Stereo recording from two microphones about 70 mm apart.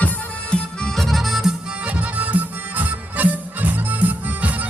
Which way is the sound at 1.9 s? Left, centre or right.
Centre.